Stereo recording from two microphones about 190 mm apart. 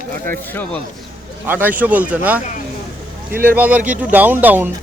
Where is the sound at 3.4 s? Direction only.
10° right (ahead or behind).